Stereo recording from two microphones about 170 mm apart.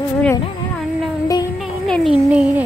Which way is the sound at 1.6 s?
Centre (ahead or behind).